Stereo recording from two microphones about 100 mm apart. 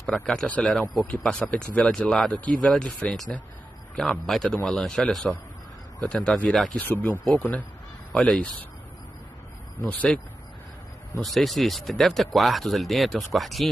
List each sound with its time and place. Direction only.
0.0 s speech: 5° left (ahead or behind)
6.8 s speech: 15° left (ahead or behind)
9.8 s speech: 15° left (ahead or behind)
11.1 s speech: centre (ahead or behind)